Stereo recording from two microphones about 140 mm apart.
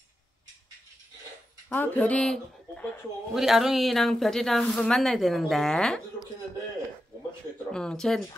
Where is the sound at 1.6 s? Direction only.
15° left (ahead or behind).